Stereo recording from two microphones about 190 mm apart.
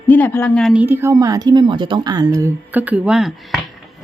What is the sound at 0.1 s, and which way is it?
A woman's voice, 10° left (ahead or behind).